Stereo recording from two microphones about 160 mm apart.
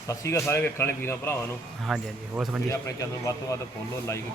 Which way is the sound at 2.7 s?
20° left (ahead or behind).